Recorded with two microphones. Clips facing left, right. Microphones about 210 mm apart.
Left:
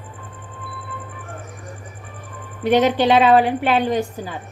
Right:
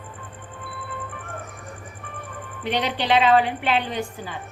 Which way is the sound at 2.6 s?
45° left (ahead or behind).